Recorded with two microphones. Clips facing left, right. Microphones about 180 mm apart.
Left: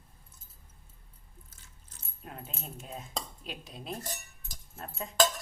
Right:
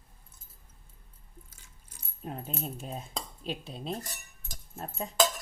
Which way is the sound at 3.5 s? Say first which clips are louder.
Right 5 dB; 30° right (ahead or behind).